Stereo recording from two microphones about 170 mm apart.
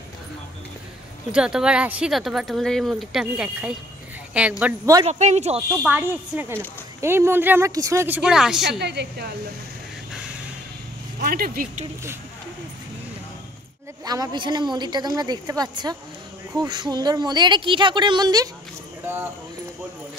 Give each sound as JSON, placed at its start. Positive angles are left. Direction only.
{"t": 1.3, "sound": "speech", "side_deg": -5}
{"t": 5.0, "sound": "speech", "side_deg": -40}
{"t": 5.8, "sound": "speech", "side_deg": -10}
{"t": 8.6, "sound": "a woman's voice", "side_deg": -80}
{"t": 11.1, "sound": "speech", "side_deg": -60}
{"t": 14.0, "sound": "a woman's voice", "side_deg": -20}